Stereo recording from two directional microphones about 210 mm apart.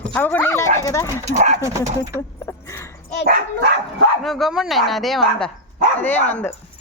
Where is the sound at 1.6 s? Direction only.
15° right (ahead or behind).